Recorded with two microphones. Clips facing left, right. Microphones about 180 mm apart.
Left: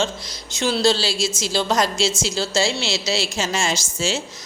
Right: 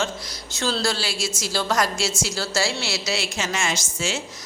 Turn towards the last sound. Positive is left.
turn(degrees=30)  # may be behind; listen again after turning